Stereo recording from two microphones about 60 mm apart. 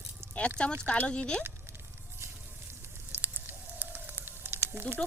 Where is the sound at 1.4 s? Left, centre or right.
Right.